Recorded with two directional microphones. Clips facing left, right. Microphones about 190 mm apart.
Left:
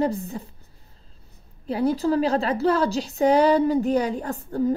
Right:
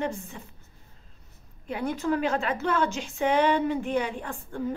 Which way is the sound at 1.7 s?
35° left (ahead or behind).